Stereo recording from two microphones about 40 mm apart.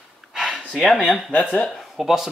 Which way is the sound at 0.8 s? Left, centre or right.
Centre.